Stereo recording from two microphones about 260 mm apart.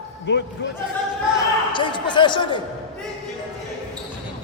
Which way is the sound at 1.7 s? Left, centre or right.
Centre.